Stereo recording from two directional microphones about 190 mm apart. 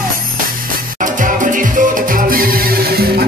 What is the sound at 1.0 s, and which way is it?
Music, 45° right (ahead or behind).